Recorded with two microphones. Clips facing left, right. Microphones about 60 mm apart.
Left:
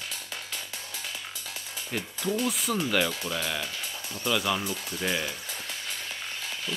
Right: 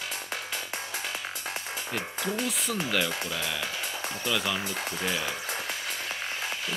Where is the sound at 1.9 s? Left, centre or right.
Right.